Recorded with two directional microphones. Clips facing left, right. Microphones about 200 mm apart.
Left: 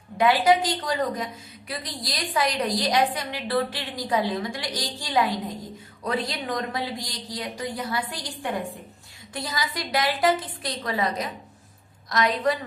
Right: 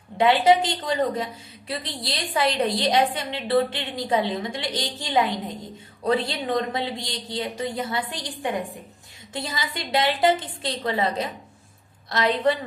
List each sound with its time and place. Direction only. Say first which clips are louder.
0.2 s a woman's voice: right 2 dB; 25° right (ahead or behind)